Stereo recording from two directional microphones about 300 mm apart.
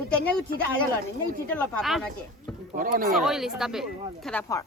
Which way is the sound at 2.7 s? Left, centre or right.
Right.